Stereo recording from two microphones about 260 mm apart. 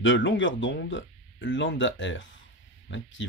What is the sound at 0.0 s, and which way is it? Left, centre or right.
Speech, left.